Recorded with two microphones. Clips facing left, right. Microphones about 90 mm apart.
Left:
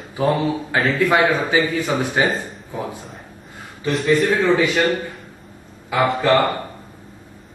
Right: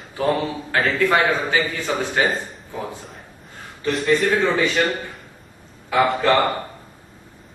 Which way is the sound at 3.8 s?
Centre (ahead or behind).